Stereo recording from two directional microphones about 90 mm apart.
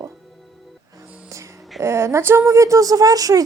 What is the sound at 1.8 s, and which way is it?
A woman's voice, 30° right (ahead or behind).